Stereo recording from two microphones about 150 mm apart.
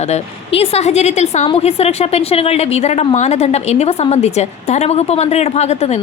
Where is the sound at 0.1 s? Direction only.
40° left (ahead or behind).